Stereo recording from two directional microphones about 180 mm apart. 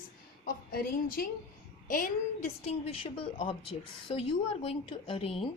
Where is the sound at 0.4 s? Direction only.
55° left (ahead or behind).